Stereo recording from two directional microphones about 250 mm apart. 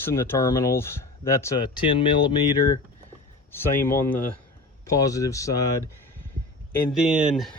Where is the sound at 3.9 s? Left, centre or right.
Centre.